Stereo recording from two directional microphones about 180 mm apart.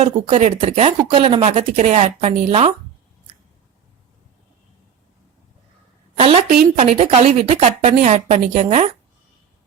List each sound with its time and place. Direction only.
0.0 s speech: 35° right (ahead or behind)
6.1 s a woman's voice: 30° right (ahead or behind)